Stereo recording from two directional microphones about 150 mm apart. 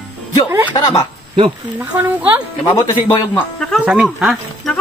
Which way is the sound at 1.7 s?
10° right (ahead or behind).